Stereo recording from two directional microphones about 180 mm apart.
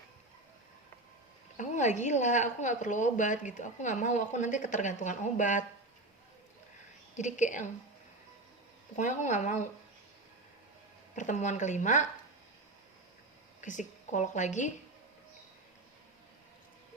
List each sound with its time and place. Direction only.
1.5 s a woman's voice: 40° left (ahead or behind)
7.2 s a woman's voice: 40° left (ahead or behind)
9.0 s a woman's voice: 45° left (ahead or behind)
11.1 s a woman's voice: 45° left (ahead or behind)
13.6 s a woman's voice: 45° left (ahead or behind)